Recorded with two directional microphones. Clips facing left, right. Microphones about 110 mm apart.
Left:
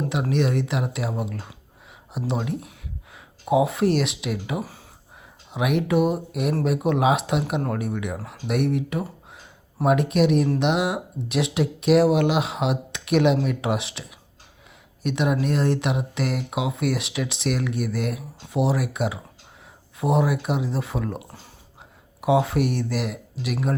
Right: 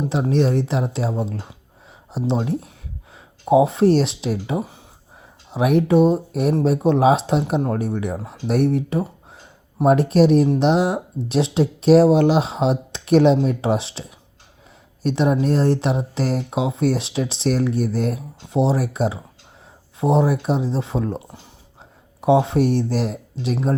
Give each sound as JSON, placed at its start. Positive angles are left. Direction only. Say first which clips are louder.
{"t": 0.1, "sound": "speech", "louder": "right 5 dB", "side_deg": -30}